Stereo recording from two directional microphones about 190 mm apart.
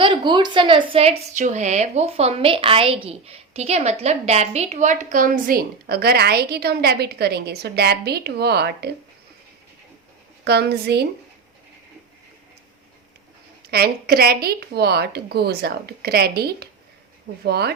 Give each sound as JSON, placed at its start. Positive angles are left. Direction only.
{"t": 0.0, "sound": "a woman's voice", "side_deg": -25}
{"t": 10.4, "sound": "a woman's voice", "side_deg": -60}
{"t": 13.7, "sound": "a woman's voice", "side_deg": -55}